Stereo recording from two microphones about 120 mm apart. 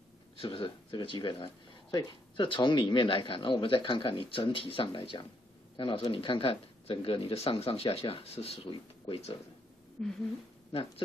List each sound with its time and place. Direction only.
0.4 s speech: 45° left (ahead or behind)
10.0 s speech: 5° left (ahead or behind)